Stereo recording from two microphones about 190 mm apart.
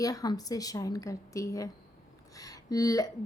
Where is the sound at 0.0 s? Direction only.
20° left (ahead or behind).